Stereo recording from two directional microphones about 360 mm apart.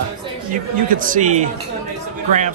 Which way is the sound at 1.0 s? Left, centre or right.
Right.